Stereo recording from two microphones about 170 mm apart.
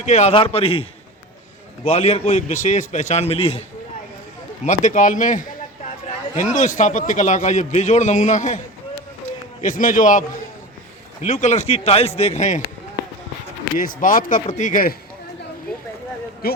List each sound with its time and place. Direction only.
0.0 s a man's voice: 45° left (ahead or behind)
4.6 s a man's voice: 45° left (ahead or behind)
13.7 s a man's voice: 50° left (ahead or behind)